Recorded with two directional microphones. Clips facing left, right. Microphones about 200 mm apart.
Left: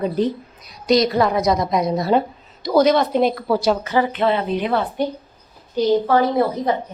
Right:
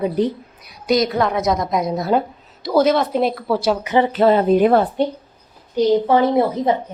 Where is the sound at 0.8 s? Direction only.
Centre (ahead or behind).